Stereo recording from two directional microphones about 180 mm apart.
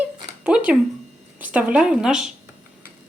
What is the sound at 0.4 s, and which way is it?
A woman's voice, 5° right (ahead or behind).